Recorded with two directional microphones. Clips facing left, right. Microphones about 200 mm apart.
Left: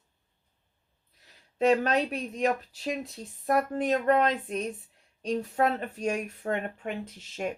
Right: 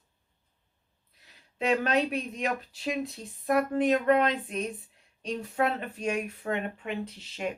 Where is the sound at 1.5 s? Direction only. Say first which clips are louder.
Left 2 dB; 40° left (ahead or behind).